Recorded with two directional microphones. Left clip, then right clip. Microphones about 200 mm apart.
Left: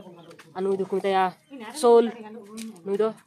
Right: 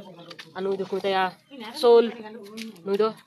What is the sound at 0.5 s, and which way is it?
A woman's voice, 30° left (ahead or behind).